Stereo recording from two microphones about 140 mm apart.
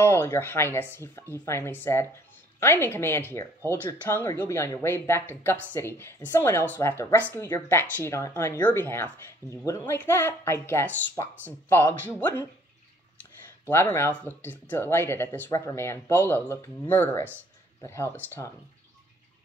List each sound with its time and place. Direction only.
0.0 s speech: 15° left (ahead or behind)
13.7 s speech: 15° left (ahead or behind)